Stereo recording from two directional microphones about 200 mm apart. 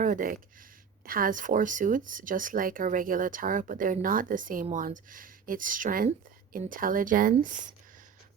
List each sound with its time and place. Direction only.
0.0 s speech: 40° right (ahead or behind)